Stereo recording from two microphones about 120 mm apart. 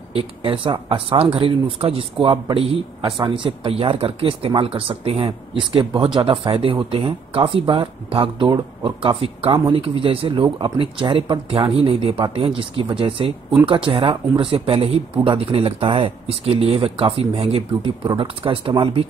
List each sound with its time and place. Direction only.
0.1 s speech: 50° right (ahead or behind)